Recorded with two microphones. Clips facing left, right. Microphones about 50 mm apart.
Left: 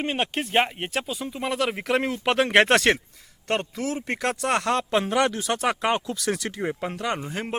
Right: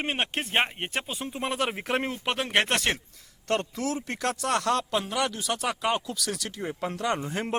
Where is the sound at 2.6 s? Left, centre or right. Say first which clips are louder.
Left 7 dB; left.